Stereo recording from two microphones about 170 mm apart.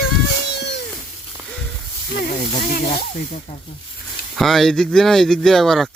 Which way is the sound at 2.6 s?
60° left (ahead or behind).